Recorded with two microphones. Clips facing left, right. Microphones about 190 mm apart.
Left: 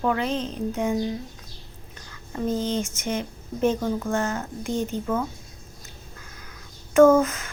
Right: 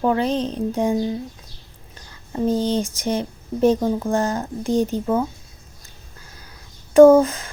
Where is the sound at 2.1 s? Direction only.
30° right (ahead or behind).